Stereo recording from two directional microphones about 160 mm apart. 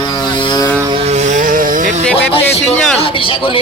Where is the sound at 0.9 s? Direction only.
45° right (ahead or behind).